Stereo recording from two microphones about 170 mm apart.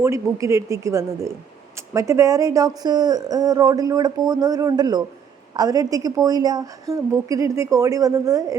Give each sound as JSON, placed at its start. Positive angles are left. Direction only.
{"t": 0.0, "sound": "speech", "side_deg": -20}